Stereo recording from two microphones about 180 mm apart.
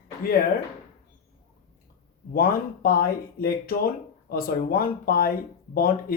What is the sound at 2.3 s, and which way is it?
Speech, 55° left (ahead or behind).